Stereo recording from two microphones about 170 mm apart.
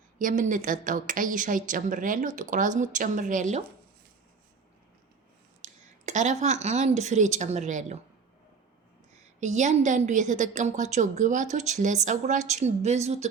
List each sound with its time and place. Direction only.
0.2 s a woman's voice: 50° right (ahead or behind)
5.6 s speech: 45° right (ahead or behind)
9.4 s a woman's voice: 45° right (ahead or behind)